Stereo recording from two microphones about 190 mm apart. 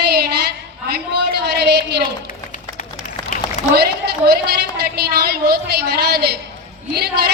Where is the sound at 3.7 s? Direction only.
55° right (ahead or behind).